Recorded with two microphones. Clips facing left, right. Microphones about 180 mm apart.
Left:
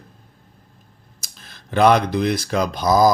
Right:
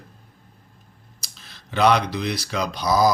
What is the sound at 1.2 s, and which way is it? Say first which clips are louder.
Speech: left 3 dB; 50° left (ahead or behind).